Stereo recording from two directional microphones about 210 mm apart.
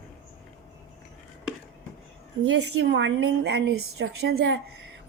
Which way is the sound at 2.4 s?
55° right (ahead or behind).